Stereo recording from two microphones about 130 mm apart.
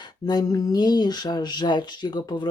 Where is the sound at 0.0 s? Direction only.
30° left (ahead or behind).